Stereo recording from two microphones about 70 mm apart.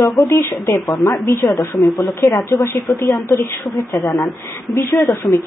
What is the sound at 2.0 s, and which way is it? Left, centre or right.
Speech, left.